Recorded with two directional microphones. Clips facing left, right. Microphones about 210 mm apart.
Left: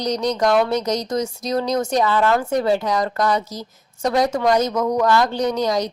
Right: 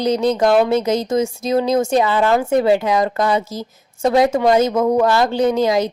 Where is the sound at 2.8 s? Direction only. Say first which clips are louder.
Right 3 dB; 25° right (ahead or behind).